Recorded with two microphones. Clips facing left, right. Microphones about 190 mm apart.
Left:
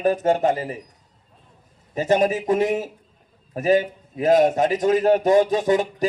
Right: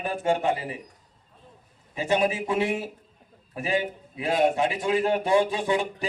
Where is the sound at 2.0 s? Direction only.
40° left (ahead or behind).